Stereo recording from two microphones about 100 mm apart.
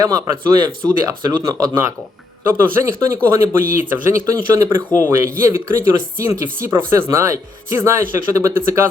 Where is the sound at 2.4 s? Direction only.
25° right (ahead or behind).